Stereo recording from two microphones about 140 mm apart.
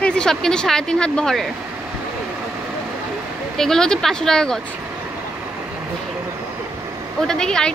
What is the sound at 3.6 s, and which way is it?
A woman's voice, 5° left (ahead or behind).